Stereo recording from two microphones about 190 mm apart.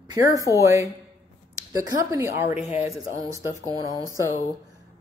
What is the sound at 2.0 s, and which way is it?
A woman's voice, 15° right (ahead or behind).